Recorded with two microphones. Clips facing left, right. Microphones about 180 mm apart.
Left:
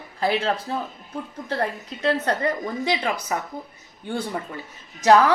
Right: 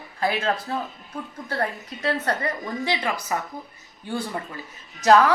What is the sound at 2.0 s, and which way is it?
A woman's voice, 20° left (ahead or behind).